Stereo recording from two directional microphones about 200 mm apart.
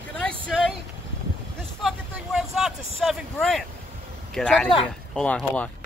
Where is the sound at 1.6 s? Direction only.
Centre (ahead or behind).